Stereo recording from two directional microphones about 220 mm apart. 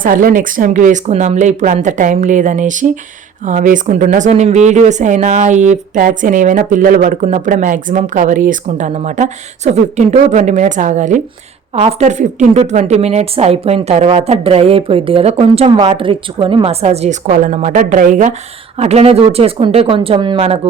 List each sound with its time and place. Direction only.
0.0 s a woman's voice: 40° right (ahead or behind)